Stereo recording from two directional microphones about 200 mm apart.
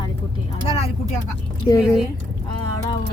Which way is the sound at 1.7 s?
20° left (ahead or behind).